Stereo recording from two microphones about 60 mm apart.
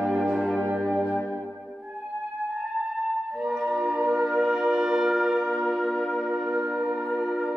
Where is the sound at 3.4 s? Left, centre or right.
Centre.